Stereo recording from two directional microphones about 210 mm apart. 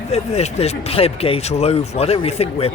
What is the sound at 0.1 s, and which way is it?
Speech, 30° left (ahead or behind).